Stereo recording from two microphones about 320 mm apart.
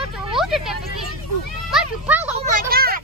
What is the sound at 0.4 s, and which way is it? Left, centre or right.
Vehicle, centre.